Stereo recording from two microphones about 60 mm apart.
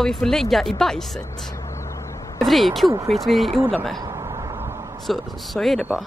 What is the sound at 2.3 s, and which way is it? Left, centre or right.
Speech, centre.